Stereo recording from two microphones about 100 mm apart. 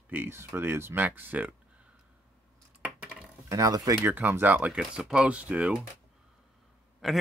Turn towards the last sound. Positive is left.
turn(degrees=0)  # may be behind; listen again after turning